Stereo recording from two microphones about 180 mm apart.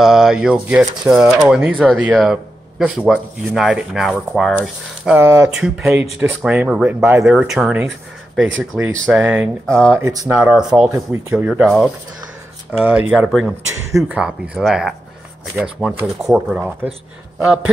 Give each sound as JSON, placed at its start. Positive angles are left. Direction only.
{"t": 0.0, "sound": "speech", "side_deg": 0}
{"t": 9.7, "sound": "speech", "side_deg": 5}
{"t": 9.9, "sound": "speech", "side_deg": -15}
{"t": 10.9, "sound": "speech", "side_deg": -15}
{"t": 11.3, "sound": "speech", "side_deg": -5}